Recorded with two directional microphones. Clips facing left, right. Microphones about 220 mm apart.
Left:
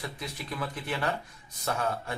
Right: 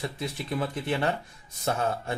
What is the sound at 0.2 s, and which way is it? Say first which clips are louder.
Speech: right 7 dB; 25° right (ahead or behind).